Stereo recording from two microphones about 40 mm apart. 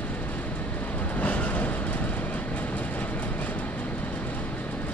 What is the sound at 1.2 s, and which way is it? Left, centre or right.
Train, left.